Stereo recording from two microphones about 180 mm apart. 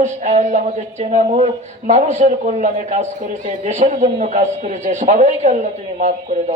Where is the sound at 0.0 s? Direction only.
40° right (ahead or behind).